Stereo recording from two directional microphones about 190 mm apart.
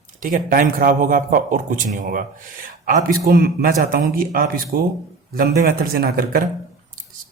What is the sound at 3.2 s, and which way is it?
A man's voice, 50° right (ahead or behind).